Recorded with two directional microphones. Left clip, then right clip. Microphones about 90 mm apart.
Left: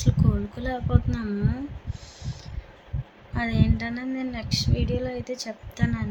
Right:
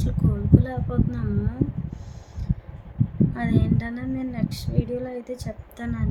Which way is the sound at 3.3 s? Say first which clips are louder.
Left 4 dB; 25° right (ahead or behind).